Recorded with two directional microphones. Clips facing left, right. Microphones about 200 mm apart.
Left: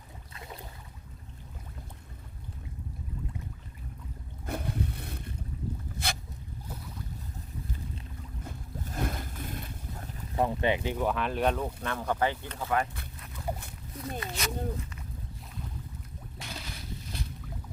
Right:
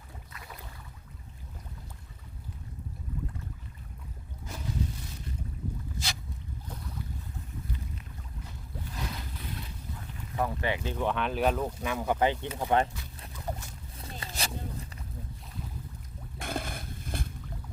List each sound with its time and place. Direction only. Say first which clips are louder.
0.3 s boat: left 4 dB; 25° left (ahead or behind)
4.4 s boat: left 2 dB; 60° left (ahead or behind)
6.0 s a sound: left 6 dB; 60° left (ahead or behind)
8.4 s boat: left 3 dB; 50° left (ahead or behind)
10.3 s speech: left 3 dB; 20° left (ahead or behind)
10.9 s speech: even; 5° left (ahead or behind); by 12.8 s 20° right (ahead or behind)
13.5 s boat: left 2 dB; 10° left (ahead or behind)
14.2 s a sound: left 2 dB; 30° right (ahead or behind)
16.4 s boat: right 8 dB; 50° right (ahead or behind)